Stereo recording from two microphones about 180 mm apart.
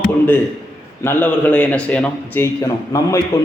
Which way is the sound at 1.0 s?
10° left (ahead or behind).